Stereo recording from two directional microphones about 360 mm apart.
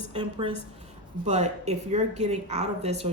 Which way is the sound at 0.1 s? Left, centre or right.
Centre.